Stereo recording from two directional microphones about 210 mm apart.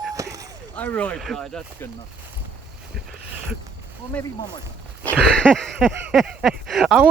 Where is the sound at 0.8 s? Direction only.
5° left (ahead or behind).